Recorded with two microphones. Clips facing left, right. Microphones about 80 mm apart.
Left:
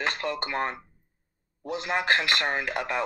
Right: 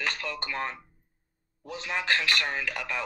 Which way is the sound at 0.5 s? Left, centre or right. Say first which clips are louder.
Left 2 dB; left.